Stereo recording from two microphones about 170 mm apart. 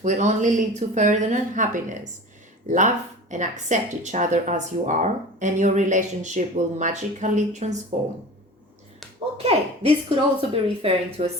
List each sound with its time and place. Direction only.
0.0 s speech: 45° right (ahead or behind)
9.4 s speech: 35° right (ahead or behind)